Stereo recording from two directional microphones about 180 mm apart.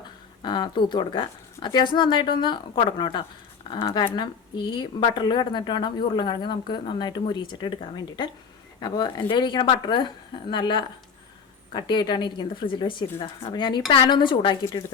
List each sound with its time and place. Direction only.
0.4 s speech: 25° left (ahead or behind)
8.8 s speech: 25° left (ahead or behind)